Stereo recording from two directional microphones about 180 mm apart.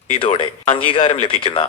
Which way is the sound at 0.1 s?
30° left (ahead or behind).